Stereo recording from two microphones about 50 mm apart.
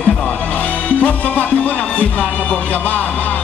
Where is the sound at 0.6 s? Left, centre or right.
Left.